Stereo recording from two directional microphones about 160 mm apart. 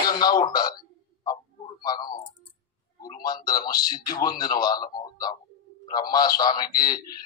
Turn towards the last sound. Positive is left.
turn(degrees=25)  # may be behind; listen again after turning